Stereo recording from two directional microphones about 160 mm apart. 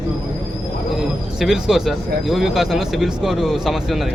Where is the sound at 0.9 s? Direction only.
Centre (ahead or behind).